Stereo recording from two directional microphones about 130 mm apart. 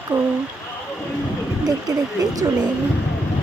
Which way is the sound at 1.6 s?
30° right (ahead or behind).